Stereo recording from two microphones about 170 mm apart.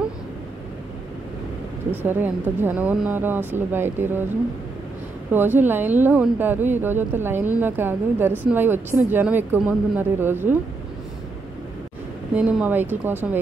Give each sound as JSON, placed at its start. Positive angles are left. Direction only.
{"t": 1.9, "sound": "speech", "side_deg": -10}
{"t": 5.3, "sound": "speech", "side_deg": -10}
{"t": 12.4, "sound": "speech", "side_deg": -10}